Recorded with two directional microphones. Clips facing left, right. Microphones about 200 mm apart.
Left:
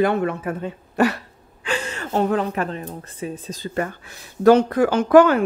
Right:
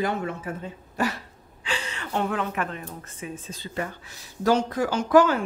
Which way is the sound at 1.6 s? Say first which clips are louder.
Left 6 dB; 50° left (ahead or behind).